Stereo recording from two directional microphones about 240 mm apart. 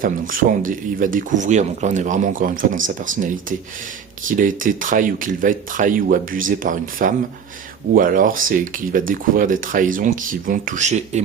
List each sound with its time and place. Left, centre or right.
0.0 s speech: right